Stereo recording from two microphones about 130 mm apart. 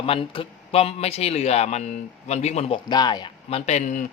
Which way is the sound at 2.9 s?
35° left (ahead or behind).